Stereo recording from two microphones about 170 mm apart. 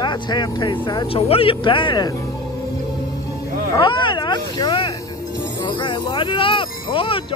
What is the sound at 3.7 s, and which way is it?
Speech, 30° left (ahead or behind).